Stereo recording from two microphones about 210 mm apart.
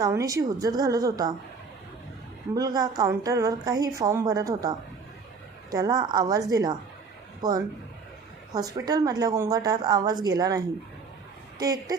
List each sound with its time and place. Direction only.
0.0 s a woman's voice: 15° right (ahead or behind)
2.6 s a woman's voice: 20° right (ahead or behind)
5.7 s a woman's voice: 20° right (ahead or behind)
8.5 s a woman's voice: 20° right (ahead or behind)
11.6 s a woman's voice: 15° right (ahead or behind)